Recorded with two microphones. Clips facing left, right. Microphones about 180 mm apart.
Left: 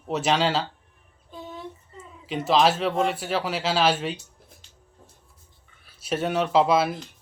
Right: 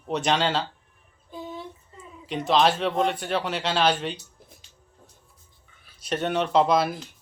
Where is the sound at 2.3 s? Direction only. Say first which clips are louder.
Left 1 dB; 5° left (ahead or behind).